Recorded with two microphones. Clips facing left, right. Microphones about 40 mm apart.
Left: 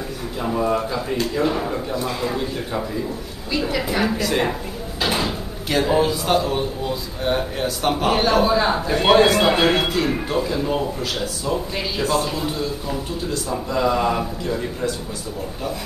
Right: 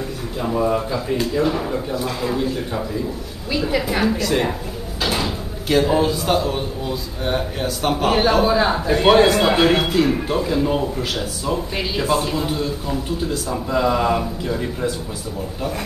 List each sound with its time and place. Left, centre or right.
0.4 s a man's voice: centre